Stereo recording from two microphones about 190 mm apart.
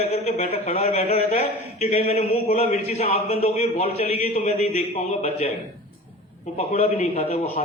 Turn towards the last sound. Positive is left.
turn(degrees=35)  # may be behind; listen again after turning